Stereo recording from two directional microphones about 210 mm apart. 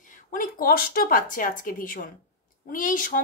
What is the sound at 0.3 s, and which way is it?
A woman's voice, 40° left (ahead or behind).